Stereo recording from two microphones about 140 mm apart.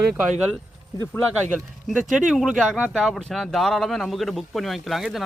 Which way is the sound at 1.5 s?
Centre (ahead or behind).